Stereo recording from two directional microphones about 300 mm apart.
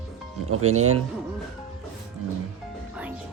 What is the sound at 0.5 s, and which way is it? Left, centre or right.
Speech, right.